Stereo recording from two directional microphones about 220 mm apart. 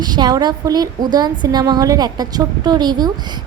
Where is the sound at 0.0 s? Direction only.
20° right (ahead or behind).